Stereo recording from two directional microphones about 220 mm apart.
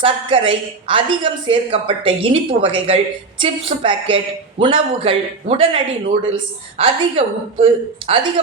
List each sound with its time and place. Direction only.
0.0 s speech: 25° right (ahead or behind)